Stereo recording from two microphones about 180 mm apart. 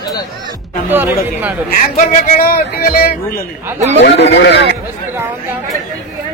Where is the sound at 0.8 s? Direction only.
10° right (ahead or behind).